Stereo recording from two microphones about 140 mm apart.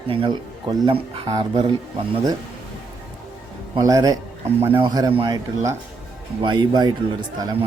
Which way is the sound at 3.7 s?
25° right (ahead or behind).